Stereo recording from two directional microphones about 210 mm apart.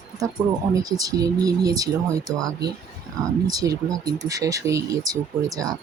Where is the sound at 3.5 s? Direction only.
15° right (ahead or behind).